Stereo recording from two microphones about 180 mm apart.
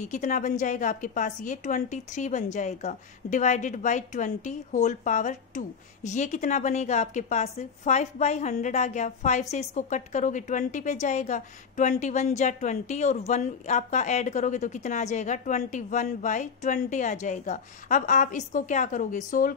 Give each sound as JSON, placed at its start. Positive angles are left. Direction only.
{"t": 0.0, "sound": "a woman's voice", "side_deg": 45}